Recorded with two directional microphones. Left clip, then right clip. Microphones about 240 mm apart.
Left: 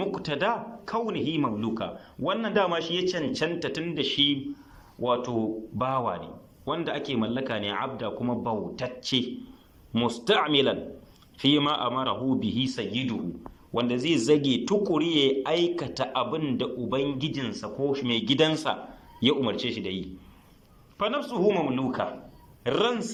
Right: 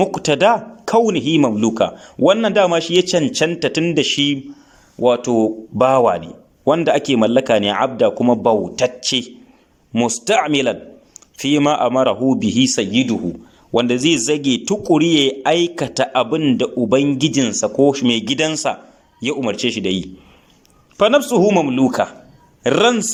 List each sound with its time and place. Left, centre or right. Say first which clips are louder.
0.0 s a man's voice: right 14 dB; right